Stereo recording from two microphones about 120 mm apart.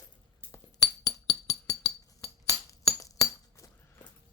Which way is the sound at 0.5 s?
30° left (ahead or behind).